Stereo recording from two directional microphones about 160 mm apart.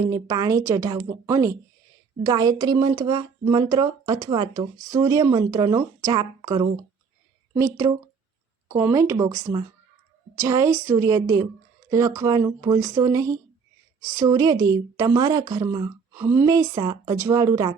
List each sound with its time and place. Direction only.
0.0 s a woman's voice: 20° right (ahead or behind)
16.5 s speech: 25° right (ahead or behind)